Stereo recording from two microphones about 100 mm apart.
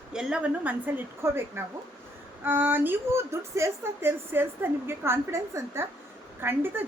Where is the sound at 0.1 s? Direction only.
5° right (ahead or behind).